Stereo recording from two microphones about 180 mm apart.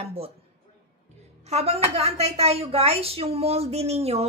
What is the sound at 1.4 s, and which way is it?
A woman's voice, 35° right (ahead or behind).